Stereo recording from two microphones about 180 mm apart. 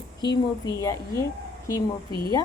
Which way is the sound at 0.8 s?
20° left (ahead or behind).